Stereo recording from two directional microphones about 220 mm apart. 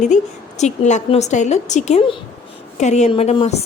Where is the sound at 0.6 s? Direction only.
30° left (ahead or behind).